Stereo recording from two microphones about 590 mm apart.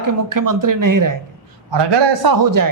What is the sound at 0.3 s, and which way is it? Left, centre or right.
Speech, right.